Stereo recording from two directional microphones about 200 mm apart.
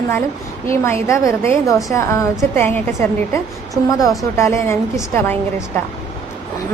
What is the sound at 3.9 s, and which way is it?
A woman's voice, 15° left (ahead or behind).